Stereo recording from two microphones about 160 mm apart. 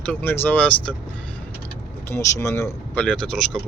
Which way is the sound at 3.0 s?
5° left (ahead or behind).